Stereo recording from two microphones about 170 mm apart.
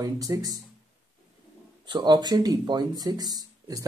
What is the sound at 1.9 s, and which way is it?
Speech, 25° right (ahead or behind).